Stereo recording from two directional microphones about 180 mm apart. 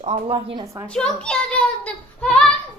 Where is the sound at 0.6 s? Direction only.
15° right (ahead or behind).